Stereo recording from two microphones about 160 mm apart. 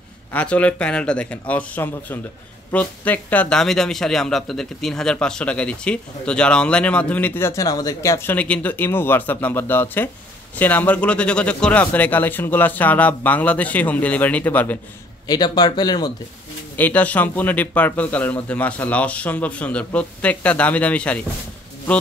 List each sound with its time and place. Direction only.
0.3 s a man's voice: 10° left (ahead or behind)
15.2 s speech: 25° left (ahead or behind)
16.7 s a man's voice: 10° left (ahead or behind)